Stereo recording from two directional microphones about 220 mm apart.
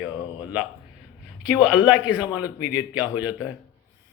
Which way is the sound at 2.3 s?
5° right (ahead or behind).